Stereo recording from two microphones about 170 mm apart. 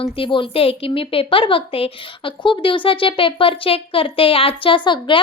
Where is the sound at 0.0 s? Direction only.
30° left (ahead or behind).